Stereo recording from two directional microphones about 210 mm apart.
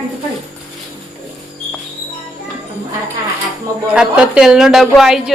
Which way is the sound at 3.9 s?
5° right (ahead or behind).